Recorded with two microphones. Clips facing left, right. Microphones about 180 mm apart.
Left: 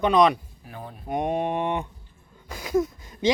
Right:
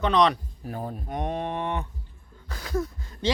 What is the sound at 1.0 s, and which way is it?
Speech, 10° left (ahead or behind).